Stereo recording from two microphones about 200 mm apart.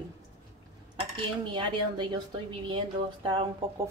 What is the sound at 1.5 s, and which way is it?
A woman's voice, 25° right (ahead or behind).